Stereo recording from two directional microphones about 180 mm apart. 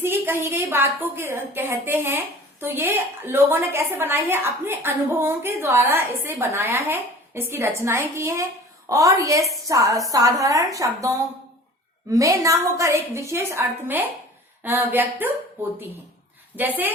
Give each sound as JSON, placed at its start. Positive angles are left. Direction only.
{"t": 0.0, "sound": "a woman's voice", "side_deg": -15}